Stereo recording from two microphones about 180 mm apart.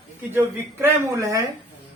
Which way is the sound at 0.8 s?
20° right (ahead or behind).